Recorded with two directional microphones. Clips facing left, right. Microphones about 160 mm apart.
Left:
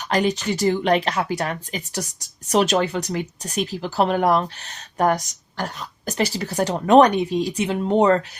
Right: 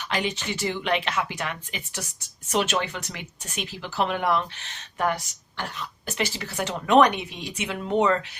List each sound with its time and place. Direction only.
0.1 s speech: 40° left (ahead or behind)